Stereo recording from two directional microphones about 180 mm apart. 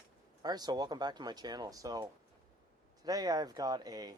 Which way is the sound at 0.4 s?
20° right (ahead or behind).